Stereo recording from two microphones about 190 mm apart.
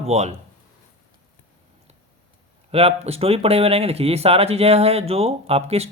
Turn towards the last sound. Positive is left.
turn(degrees=-30)  # may be behind; listen again after turning